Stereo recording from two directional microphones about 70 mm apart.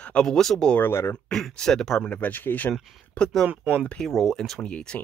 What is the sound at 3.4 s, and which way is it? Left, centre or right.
Speech, right.